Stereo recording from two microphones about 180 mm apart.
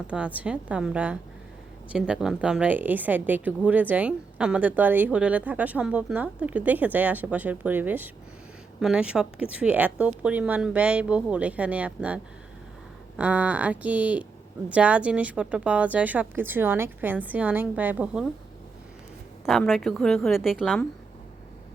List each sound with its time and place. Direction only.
0.3 s a woman's voice: 5° right (ahead or behind)
19.5 s a woman's voice: centre (ahead or behind)